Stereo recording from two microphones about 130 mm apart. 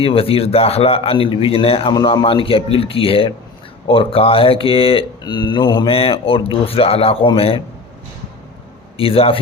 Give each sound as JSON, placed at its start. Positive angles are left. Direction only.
{"t": 0.0, "sound": "speech", "side_deg": 45}
{"t": 1.9, "sound": "speech", "side_deg": 35}
{"t": 5.2, "sound": "speech", "side_deg": 35}
{"t": 9.0, "sound": "speech", "side_deg": 45}